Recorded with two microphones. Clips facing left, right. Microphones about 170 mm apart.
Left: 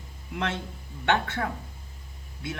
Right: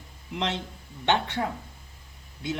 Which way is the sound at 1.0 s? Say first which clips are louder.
Even; 15° right (ahead or behind).